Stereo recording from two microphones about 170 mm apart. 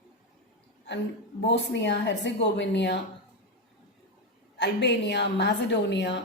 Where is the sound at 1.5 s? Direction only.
90° left.